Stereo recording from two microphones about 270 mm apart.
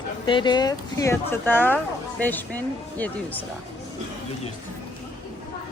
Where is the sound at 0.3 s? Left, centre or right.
Centre.